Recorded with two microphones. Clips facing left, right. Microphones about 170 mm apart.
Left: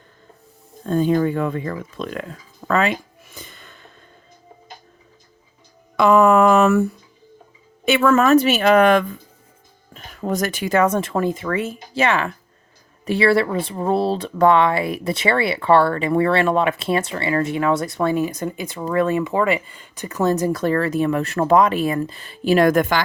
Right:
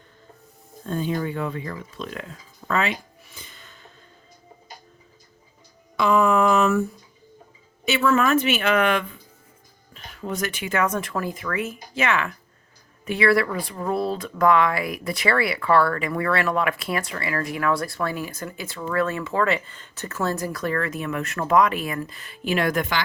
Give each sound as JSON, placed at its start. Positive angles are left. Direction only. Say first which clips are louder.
{"t": 0.9, "sound": "speech", "louder": "left 8 dB", "side_deg": 50}
{"t": 3.3, "sound": "snort", "louder": "left 6 dB", "side_deg": 50}
{"t": 6.0, "sound": "a sound", "louder": "left 6 dB", "side_deg": 60}
{"t": 7.9, "sound": "speech", "louder": "left 5 dB", "side_deg": 55}